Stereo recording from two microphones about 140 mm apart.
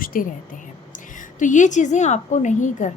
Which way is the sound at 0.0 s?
85° left.